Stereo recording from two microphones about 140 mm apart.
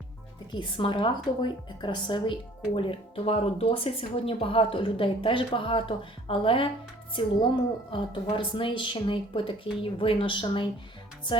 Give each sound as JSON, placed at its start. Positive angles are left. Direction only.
{"t": 0.5, "sound": "speech", "side_deg": 35}